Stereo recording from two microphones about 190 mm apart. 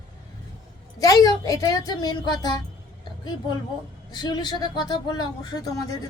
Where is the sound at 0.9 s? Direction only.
20° left (ahead or behind).